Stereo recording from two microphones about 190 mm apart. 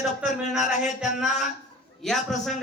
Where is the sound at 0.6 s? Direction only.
40° left (ahead or behind).